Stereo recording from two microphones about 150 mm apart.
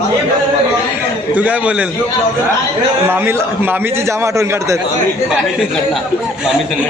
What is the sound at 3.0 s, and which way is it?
A man's voice, 15° right (ahead or behind).